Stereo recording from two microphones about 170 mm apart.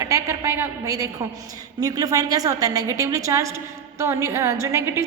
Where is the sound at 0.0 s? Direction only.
15° right (ahead or behind).